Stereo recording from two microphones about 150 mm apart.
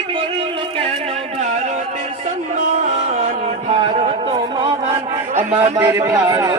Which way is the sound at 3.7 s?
45° right (ahead or behind).